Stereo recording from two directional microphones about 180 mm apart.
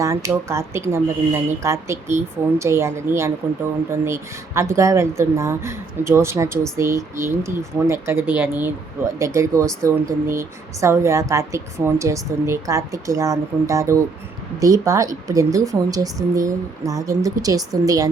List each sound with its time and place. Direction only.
0.0 s speech: 15° right (ahead or behind)